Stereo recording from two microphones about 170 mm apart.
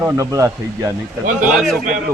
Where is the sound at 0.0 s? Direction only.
15° right (ahead or behind).